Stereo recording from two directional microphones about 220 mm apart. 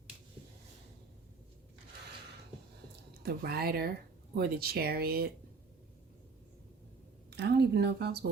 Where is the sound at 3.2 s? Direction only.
45° right (ahead or behind).